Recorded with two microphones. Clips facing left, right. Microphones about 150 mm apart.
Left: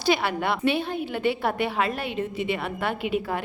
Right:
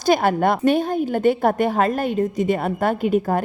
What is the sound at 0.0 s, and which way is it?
A woman's voice, 45° right (ahead or behind).